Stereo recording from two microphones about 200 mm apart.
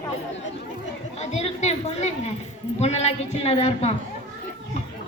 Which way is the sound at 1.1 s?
35° left (ahead or behind).